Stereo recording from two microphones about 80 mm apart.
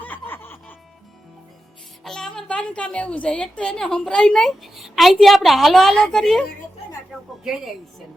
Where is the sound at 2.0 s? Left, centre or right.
Centre.